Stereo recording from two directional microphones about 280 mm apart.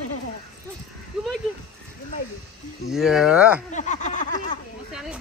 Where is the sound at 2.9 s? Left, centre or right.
Centre.